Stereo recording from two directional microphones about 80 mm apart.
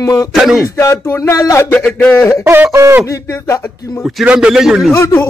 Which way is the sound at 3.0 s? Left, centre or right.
Left.